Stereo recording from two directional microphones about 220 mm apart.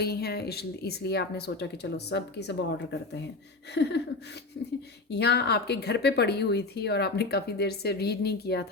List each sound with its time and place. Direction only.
0.0 s speech: 45° left (ahead or behind)
3.8 s a sound: 55° left (ahead or behind)
5.1 s speech: 50° left (ahead or behind)